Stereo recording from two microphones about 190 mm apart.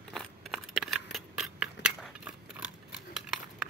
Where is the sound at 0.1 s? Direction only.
Centre (ahead or behind).